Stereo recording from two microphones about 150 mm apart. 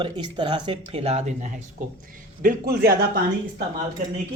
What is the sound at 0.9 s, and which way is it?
Speech, 40° right (ahead or behind).